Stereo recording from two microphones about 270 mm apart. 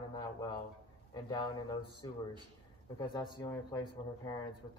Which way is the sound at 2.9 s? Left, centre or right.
Centre.